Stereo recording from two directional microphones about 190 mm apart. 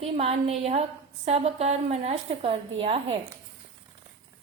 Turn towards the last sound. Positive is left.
turn(degrees=-30)  # may be behind; listen again after turning